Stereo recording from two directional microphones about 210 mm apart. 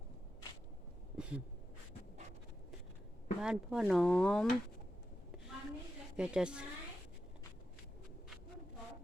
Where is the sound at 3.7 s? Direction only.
Centre (ahead or behind).